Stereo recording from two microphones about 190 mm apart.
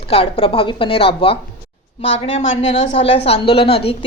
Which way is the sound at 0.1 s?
30° left (ahead or behind).